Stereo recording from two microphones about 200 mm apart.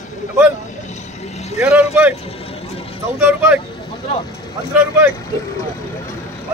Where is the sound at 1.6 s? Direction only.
15° right (ahead or behind).